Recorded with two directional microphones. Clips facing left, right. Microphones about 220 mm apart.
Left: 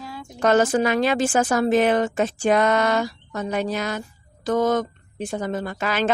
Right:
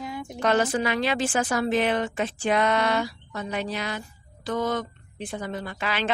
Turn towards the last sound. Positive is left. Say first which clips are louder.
# left 5 dB
turn(degrees=45)  # may be behind; listen again after turning